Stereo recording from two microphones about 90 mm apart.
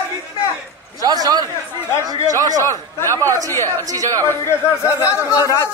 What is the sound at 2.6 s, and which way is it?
Speech, 30° left (ahead or behind).